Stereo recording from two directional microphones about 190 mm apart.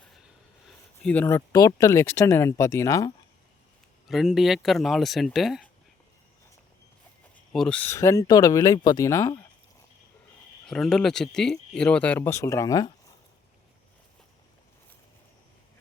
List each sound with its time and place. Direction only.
1.0 s speech: 10° left (ahead or behind)
4.1 s speech: centre (ahead or behind)
7.3 s speech: 5° left (ahead or behind)
10.7 s speech: centre (ahead or behind); by 12.9 s 20° left (ahead or behind)